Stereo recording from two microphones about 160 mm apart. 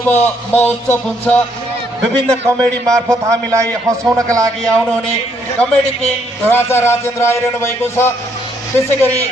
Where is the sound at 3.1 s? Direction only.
20° right (ahead or behind).